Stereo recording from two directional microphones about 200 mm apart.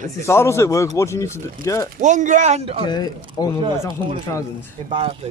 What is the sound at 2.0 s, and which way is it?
Speech, 40° right (ahead or behind).